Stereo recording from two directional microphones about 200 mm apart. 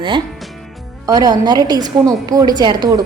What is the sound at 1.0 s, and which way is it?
A woman's voice, 20° right (ahead or behind).